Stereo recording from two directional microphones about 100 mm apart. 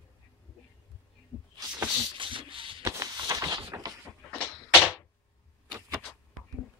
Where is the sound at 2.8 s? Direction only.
35° right (ahead or behind).